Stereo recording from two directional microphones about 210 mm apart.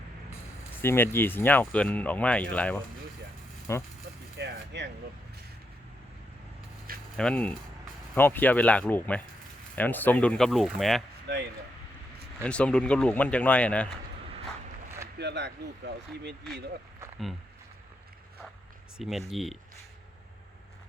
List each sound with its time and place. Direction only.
0.8 s speech: 10° left (ahead or behind)
4.4 s music: 55° right (ahead or behind)
7.2 s speech: 5° left (ahead or behind)
11.3 s speech: 55° right (ahead or behind)
12.4 s speech: 5° left (ahead or behind)
15.2 s speech: 55° right (ahead or behind)
18.9 s speech: centre (ahead or behind)